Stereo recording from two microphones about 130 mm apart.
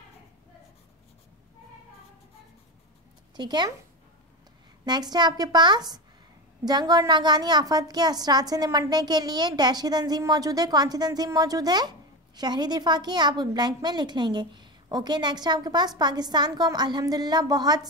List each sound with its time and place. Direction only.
3.3 s a woman's voice: 35° right (ahead or behind)
4.8 s a woman's voice: 35° right (ahead or behind)